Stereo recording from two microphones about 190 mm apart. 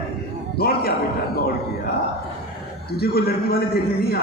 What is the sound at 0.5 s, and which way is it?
Speech, 55° left (ahead or behind).